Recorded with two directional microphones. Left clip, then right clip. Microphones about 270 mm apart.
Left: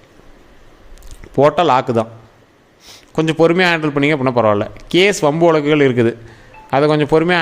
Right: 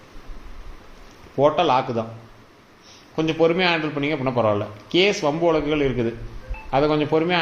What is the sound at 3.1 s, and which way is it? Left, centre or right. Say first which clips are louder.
A man's voice: left 6 dB; left.